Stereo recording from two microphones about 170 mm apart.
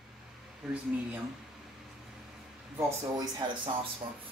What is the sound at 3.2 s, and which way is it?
Speech, 20° right (ahead or behind).